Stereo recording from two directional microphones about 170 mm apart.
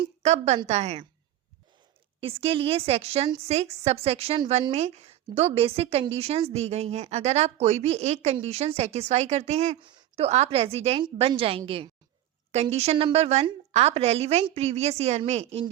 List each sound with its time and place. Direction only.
0.0 s a woman's voice: 40° right (ahead or behind)
2.2 s a woman's voice: 35° right (ahead or behind)
9.8 s a sound: 30° right (ahead or behind)
10.2 s a woman's voice: 40° right (ahead or behind)